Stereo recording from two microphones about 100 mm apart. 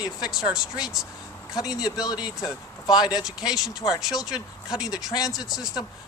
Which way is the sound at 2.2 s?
45° left (ahead or behind).